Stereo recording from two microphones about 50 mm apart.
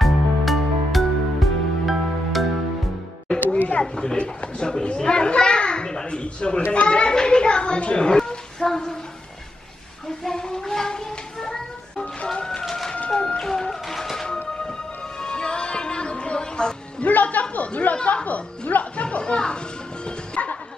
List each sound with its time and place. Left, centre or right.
0.0 s music: centre
3.5 s a sound: left
3.8 s a child's voice: centre
10.2 s a sound: centre
12.3 s music: centre
12.6 s bird: centre
13.4 s music: centre
15.2 s music: centre
17.1 s music: left